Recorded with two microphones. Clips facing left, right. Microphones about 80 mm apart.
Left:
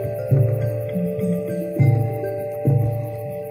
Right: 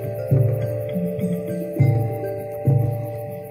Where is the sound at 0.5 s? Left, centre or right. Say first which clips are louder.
Even; centre.